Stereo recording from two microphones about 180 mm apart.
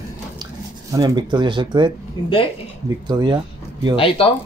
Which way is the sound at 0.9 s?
25° right (ahead or behind).